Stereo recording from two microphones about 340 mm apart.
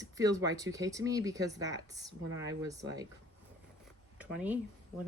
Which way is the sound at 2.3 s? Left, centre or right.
Right.